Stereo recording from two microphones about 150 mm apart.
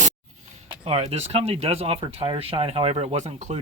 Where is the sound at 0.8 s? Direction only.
45° right (ahead or behind).